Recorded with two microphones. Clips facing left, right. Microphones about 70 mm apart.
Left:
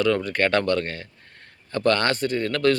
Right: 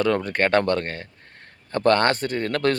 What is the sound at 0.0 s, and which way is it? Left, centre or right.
Speech, right.